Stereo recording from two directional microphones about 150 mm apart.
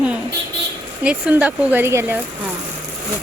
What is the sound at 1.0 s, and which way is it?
Speech, 10° right (ahead or behind).